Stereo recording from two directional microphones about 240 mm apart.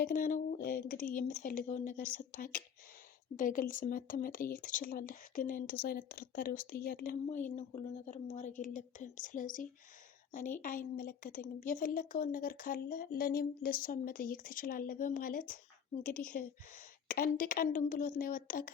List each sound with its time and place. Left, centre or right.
0.0 s speech: left
3.3 s speech: left
10.9 s speech: left